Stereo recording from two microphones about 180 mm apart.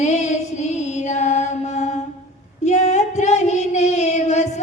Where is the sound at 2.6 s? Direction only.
40° left (ahead or behind).